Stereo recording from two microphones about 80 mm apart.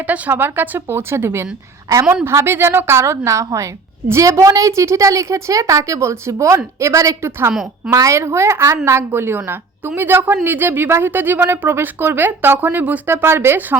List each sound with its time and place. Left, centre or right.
0.1 s a woman's voice: right
7.2 s a woman's voice: right